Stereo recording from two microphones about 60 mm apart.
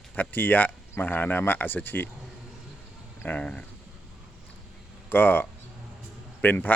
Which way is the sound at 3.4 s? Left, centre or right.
Centre.